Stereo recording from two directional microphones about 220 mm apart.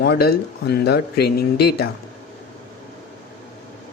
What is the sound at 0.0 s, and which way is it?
Speech, 45° left (ahead or behind).